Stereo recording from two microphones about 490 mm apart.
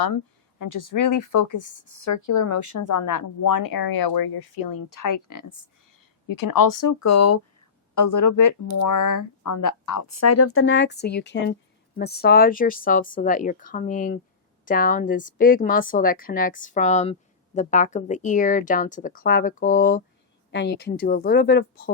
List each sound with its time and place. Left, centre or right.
0.6 s a woman's voice: left; by 21.9 s centre